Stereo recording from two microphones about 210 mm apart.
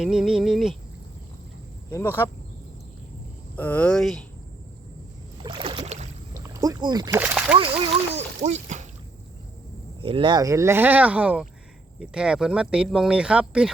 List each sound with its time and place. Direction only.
0.0 s a sound: centre (ahead or behind)
1.9 s speech: 10° left (ahead or behind)
3.5 s speech: 5° left (ahead or behind)
5.4 s boat: 25° right (ahead or behind)
6.3 s a sound: 15° right (ahead or behind)
7.2 s speech: 5° right (ahead or behind)
7.5 s speech: 25° right (ahead or behind)
10.0 s speech: 25° right (ahead or behind); by 13.7 s 5° right (ahead or behind)